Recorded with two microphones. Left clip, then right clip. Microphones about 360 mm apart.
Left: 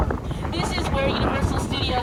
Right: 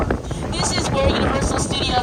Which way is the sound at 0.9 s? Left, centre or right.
Right.